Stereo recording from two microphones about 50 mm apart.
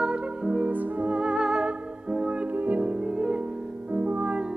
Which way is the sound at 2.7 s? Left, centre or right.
Centre.